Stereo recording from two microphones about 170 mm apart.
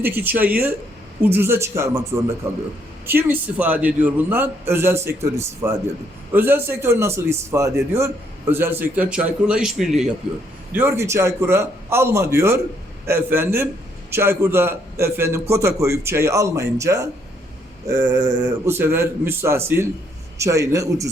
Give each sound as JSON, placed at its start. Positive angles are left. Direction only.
{"t": 0.0, "sound": "a man's voice", "side_deg": -10}
{"t": 10.7, "sound": "a man's voice", "side_deg": -15}
{"t": 17.9, "sound": "a sound", "side_deg": -20}
{"t": 18.4, "sound": "a man's voice", "side_deg": -15}